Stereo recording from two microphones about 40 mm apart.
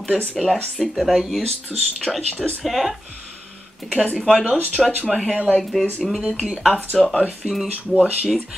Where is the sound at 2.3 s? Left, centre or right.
Left.